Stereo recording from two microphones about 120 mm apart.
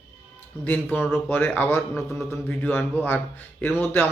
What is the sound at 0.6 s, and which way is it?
Speech, 15° left (ahead or behind).